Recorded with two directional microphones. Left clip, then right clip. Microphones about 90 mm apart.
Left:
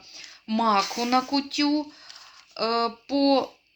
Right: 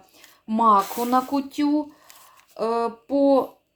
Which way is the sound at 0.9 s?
25° right (ahead or behind).